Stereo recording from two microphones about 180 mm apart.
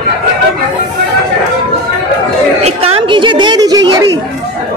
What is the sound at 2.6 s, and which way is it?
Chatter, 30° right (ahead or behind).